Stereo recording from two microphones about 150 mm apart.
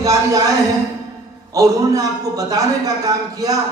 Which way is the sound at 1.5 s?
25° right (ahead or behind).